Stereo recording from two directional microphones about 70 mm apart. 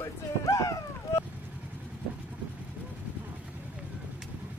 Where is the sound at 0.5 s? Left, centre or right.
Left.